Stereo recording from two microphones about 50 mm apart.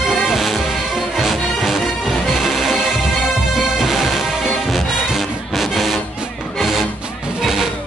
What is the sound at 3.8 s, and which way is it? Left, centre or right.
Music, centre.